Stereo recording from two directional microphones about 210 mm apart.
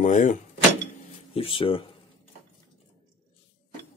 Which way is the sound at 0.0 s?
35° left (ahead or behind).